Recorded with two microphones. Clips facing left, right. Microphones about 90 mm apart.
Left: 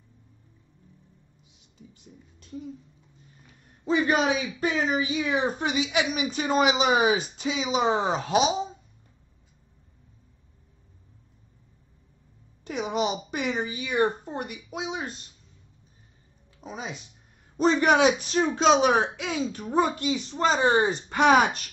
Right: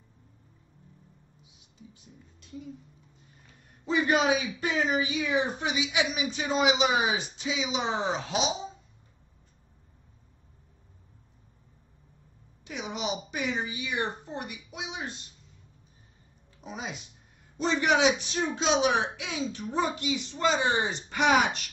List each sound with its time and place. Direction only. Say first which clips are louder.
3.8 s a woman's voice: left 2 dB; 35° left (ahead or behind); by 8.5 s 50° left (ahead or behind)
12.6 s a woman's voice: left 6 dB; 50° left (ahead or behind)
16.6 s speech: left 2 dB; 30° left (ahead or behind)
17.6 s a woman's voice: left 5 dB; 45° left (ahead or behind)